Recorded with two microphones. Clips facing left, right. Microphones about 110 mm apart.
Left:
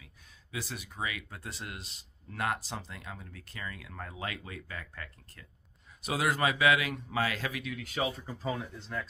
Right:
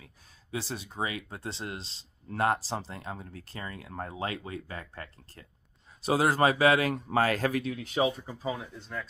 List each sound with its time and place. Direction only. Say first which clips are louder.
0.0 s speech: right 3 dB; 30° right (ahead or behind)
8.4 s speech: right 1 dB; 5° right (ahead or behind)